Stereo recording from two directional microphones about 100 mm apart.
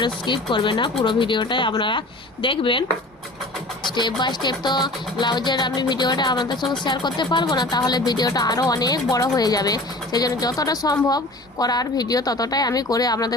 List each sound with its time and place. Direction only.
0.0 s speech: 55° left (ahead or behind)
3.8 s speech: 50° left (ahead or behind)